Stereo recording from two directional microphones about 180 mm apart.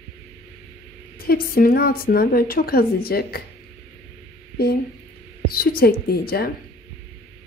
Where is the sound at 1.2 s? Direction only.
55° left (ahead or behind).